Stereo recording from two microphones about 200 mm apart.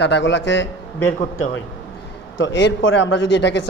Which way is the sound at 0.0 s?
60° left (ahead or behind).